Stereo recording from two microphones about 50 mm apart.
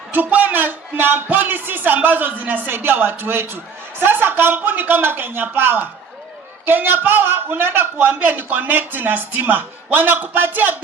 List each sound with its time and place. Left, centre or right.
0.1 s a man's voice: right
2.7 s a man's voice: right